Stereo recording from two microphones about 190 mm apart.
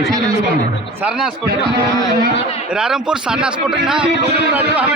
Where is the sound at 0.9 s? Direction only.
5° right (ahead or behind).